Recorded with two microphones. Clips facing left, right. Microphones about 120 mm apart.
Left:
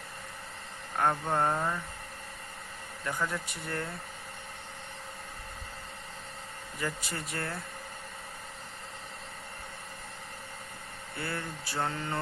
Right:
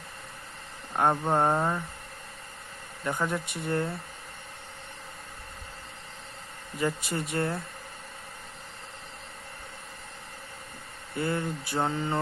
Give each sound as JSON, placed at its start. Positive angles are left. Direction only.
{"t": 0.9, "sound": "mantra", "side_deg": -30}
{"t": 3.0, "sound": "mantra", "side_deg": -25}
{"t": 6.7, "sound": "mantra", "side_deg": -25}
{"t": 11.2, "sound": "mantra", "side_deg": -20}